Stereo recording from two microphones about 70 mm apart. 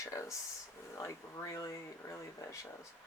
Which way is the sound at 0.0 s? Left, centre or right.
Left.